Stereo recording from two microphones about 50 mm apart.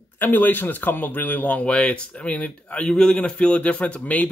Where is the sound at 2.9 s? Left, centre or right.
Centre.